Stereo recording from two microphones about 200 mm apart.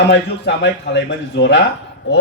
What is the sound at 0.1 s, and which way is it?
A man's voice, 60° left (ahead or behind).